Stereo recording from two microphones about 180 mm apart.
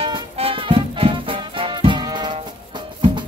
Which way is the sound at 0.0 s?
30° right (ahead or behind).